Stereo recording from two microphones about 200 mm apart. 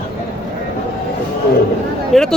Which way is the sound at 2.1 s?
Centre (ahead or behind).